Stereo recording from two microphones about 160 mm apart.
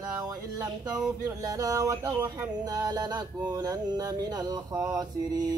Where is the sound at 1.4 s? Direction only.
20° right (ahead or behind).